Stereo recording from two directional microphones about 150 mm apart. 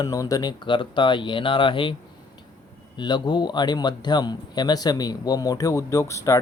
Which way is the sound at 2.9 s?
30° left (ahead or behind).